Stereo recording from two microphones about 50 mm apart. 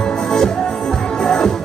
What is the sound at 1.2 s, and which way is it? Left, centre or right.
Music, centre.